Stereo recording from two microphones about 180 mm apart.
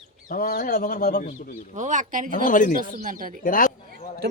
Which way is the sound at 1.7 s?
45° right (ahead or behind).